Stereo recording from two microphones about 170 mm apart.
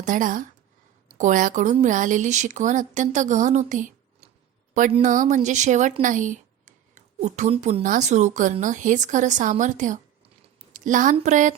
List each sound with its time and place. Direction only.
0.0 s a woman's voice: 50° right (ahead or behind)
4.9 s a woman's voice: 35° right (ahead or behind)
5.1 s a woman's voice: 45° right (ahead or behind)